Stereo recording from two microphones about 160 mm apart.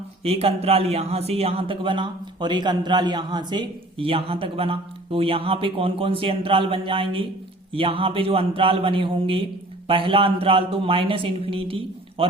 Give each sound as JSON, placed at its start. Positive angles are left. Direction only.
{"t": 0.3, "sound": "a man's voice", "side_deg": -40}